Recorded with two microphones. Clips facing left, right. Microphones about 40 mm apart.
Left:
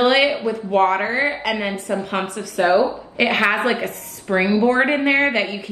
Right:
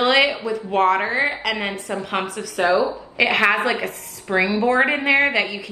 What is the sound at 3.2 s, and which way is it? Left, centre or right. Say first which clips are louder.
Speech: even; centre.